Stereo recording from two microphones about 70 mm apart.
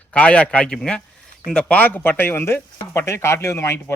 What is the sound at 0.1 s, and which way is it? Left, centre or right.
A man's voice, centre.